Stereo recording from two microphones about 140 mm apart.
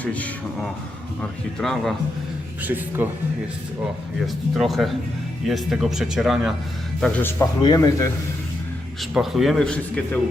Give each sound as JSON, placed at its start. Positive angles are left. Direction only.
{"t": 0.0, "sound": "speech", "side_deg": 10}
{"t": 2.6, "sound": "speech", "side_deg": -15}
{"t": 4.5, "sound": "speech", "side_deg": 0}
{"t": 7.2, "sound": "speech", "side_deg": 15}
{"t": 7.6, "sound": "speech", "side_deg": 25}
{"t": 9.0, "sound": "speech", "side_deg": 0}